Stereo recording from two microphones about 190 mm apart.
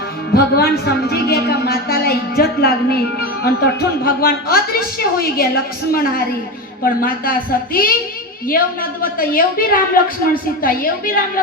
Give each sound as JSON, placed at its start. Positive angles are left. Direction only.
{"t": 0.3, "sound": "a woman's voice", "side_deg": 55}